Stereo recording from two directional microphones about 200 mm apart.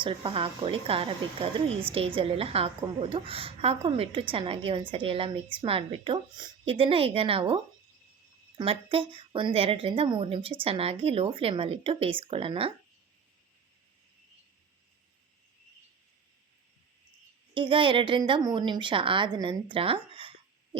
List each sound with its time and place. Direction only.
0.0 s a woman's voice: 25° right (ahead or behind)
17.5 s a woman's voice: 25° right (ahead or behind)